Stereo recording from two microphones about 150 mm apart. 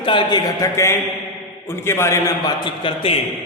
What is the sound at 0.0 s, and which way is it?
A man's voice, 35° left (ahead or behind).